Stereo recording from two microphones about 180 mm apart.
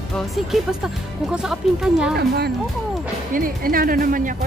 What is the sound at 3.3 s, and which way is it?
Speech, 50° right (ahead or behind).